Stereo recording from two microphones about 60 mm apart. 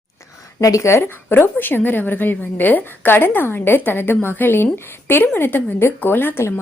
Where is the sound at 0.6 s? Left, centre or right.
Left.